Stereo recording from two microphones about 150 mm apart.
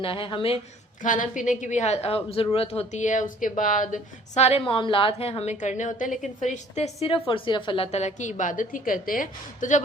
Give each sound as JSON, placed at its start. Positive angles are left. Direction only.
{"t": 0.0, "sound": "a woman's voice", "side_deg": 35}
{"t": 1.0, "sound": "a woman's voice", "side_deg": 60}
{"t": 7.9, "sound": "a woman's voice", "side_deg": 50}